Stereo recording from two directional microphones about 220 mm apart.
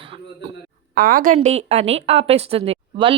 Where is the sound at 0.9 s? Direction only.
40° right (ahead or behind).